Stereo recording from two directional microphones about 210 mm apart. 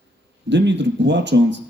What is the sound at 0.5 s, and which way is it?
A man's voice, 55° right (ahead or behind).